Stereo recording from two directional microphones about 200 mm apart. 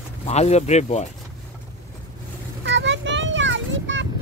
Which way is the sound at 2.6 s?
65° right (ahead or behind).